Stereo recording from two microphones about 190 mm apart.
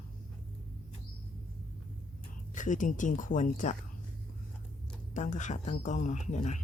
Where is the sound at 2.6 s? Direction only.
40° left (ahead or behind).